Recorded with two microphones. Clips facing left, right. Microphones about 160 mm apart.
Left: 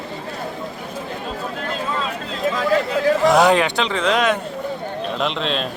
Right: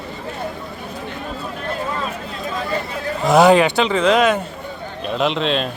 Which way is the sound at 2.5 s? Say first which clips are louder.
Left 6 dB; 90° left.